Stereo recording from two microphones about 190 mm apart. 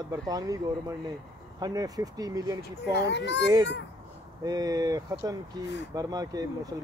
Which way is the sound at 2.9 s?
65° left (ahead or behind).